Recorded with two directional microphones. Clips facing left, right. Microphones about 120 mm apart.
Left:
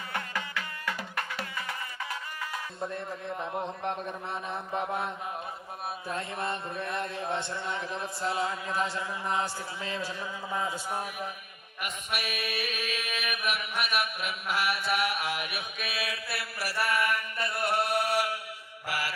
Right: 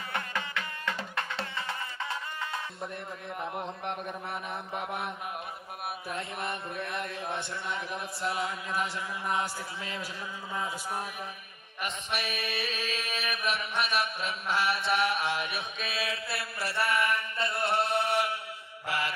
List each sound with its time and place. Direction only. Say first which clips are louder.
0.1 s music: even; 25° right (ahead or behind)
2.9 s speech: left 3 dB; 25° left (ahead or behind)
6.3 s speech: left 2 dB; 30° left (ahead or behind)
11.8 s mantra: right 1 dB; 30° right (ahead or behind)
18.9 s music: right 1 dB; 25° right (ahead or behind)